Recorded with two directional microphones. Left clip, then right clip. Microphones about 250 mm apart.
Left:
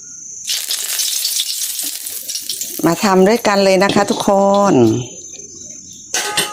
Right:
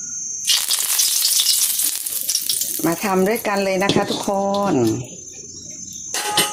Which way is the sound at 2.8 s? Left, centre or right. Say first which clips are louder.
Left 7 dB; left.